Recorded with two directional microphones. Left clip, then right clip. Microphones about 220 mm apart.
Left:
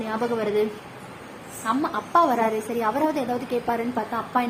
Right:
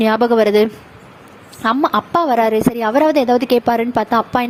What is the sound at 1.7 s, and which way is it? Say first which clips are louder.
A woman's voice: right 10 dB; 45° right (ahead or behind).